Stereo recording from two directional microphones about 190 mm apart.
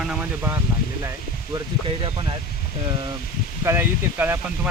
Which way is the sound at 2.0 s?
25° right (ahead or behind).